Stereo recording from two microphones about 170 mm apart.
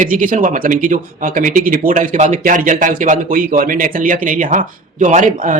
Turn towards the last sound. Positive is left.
turn(degrees=-50)  # may be behind; listen again after turning